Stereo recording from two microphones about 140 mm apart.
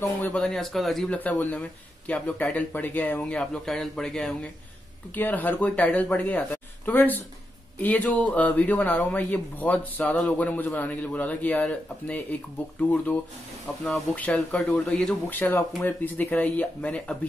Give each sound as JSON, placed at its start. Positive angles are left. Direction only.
{"t": 0.2, "sound": "speech", "side_deg": 5}